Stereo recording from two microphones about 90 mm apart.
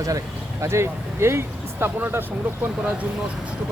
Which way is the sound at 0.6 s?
30° right (ahead or behind).